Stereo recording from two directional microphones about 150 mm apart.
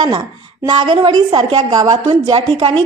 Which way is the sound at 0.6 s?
30° right (ahead or behind).